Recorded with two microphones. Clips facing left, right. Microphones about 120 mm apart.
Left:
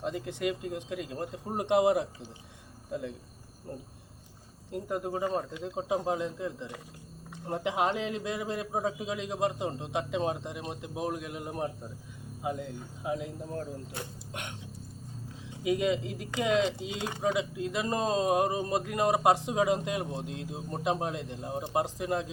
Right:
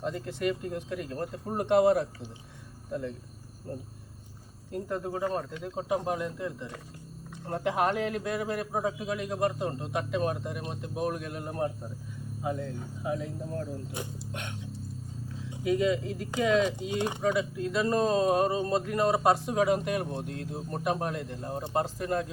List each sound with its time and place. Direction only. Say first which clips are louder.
0.0 s speech: right 1 dB; 20° left (ahead or behind)
4.7 s a man's voice: even; 15° left (ahead or behind)
15.6 s speech: right 2 dB; 15° left (ahead or behind)